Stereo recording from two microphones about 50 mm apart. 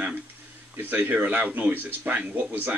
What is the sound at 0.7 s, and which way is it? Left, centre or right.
Speech, right.